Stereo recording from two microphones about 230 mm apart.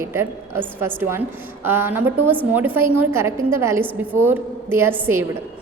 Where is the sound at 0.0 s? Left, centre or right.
Centre.